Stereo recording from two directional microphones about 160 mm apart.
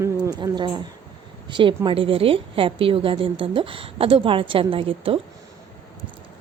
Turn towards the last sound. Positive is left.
turn(degrees=-35)  # may be behind; listen again after turning